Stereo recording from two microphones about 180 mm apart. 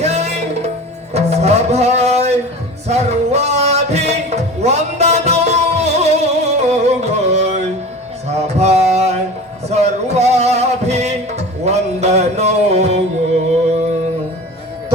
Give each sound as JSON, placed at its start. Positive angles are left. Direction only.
{"t": 0.0, "sound": "music", "side_deg": -35}